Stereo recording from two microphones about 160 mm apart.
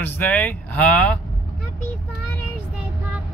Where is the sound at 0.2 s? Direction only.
10° left (ahead or behind).